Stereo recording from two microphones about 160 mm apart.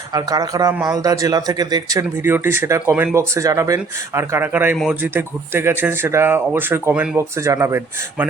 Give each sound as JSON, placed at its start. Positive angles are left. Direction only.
{"t": 0.1, "sound": "speech", "side_deg": -25}